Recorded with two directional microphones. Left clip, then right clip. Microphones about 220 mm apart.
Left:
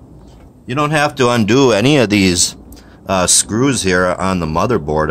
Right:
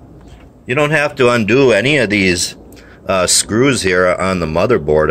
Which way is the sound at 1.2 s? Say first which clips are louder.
Right 3 dB; 20° left (ahead or behind).